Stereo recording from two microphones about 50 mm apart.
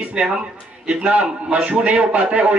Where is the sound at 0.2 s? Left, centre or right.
Right.